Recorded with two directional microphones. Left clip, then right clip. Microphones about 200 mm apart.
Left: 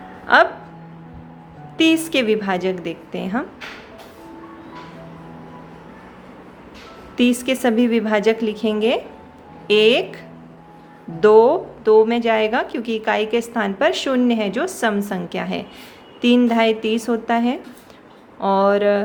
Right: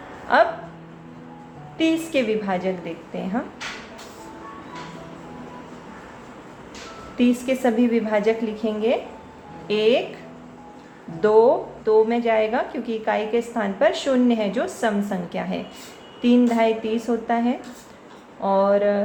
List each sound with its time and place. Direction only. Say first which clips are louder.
0.3 s a woman's voice: left 4 dB; 40° left (ahead or behind)
1.8 s a woman's voice: left 4 dB; 40° left (ahead or behind)
7.2 s a woman's voice: left 3 dB; 40° left (ahead or behind)
11.2 s a woman's voice: left 4 dB; 40° left (ahead or behind)